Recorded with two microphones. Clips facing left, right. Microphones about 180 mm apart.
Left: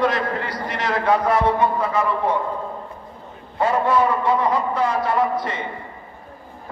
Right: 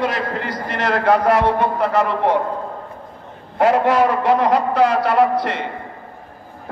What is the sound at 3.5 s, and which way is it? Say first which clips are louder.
A man's voice: right 4 dB; 80° right.